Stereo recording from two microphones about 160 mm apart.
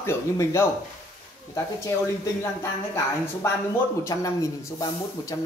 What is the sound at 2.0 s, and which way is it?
Speech, 15° left (ahead or behind).